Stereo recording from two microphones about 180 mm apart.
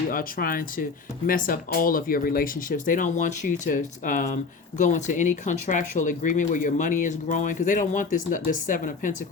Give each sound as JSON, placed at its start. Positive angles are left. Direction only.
{"t": 0.1, "sound": "speech", "side_deg": 50}